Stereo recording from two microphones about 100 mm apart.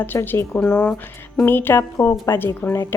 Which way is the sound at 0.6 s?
10° left (ahead or behind).